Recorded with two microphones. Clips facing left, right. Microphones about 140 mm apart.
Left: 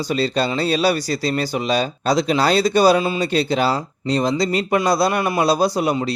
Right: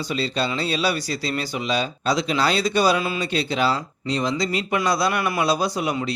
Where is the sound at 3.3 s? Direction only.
40° left (ahead or behind).